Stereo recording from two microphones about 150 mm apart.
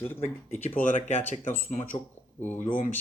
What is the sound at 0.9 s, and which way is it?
Speech, 50° left (ahead or behind).